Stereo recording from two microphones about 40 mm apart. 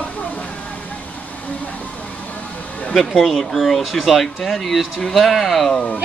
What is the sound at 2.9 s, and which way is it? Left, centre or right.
Speech, centre.